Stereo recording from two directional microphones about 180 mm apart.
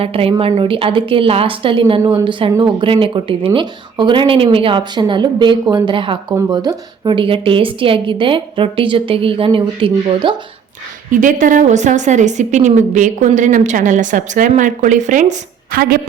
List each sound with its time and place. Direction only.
0.0 s a woman's voice: 30° right (ahead or behind)
11.1 s a woman's voice: 45° right (ahead or behind)